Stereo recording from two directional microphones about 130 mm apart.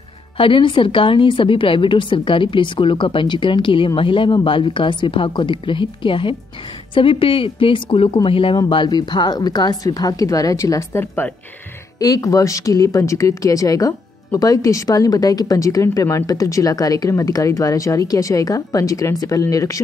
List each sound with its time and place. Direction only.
0.4 s a woman's voice: 40° left (ahead or behind); by 11.3 s 15° left (ahead or behind)
12.0 s a woman's voice: 25° left (ahead or behind)